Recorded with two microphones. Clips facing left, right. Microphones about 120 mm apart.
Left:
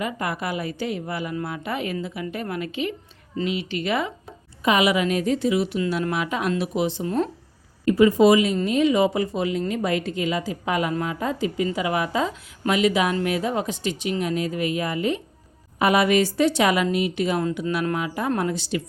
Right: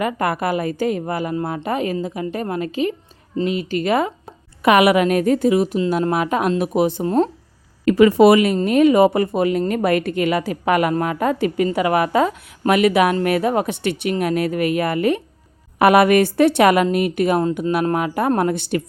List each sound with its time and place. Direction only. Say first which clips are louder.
0.0 s a woman's voice: right 7 dB; 55° right (ahead or behind)
4.6 s a woman's voice: right 6 dB; 65° right (ahead or behind)
7.9 s a woman's voice: right 4 dB; 85° right; by 18.8 s 55° right (ahead or behind)